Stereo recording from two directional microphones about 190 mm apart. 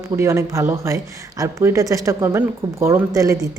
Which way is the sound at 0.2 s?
15° right (ahead or behind).